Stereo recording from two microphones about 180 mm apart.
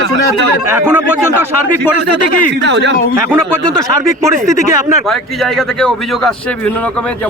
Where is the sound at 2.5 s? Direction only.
75° right (ahead or behind).